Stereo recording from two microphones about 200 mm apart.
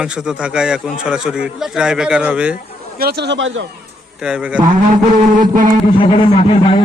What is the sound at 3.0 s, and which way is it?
Speech, 55° right (ahead or behind).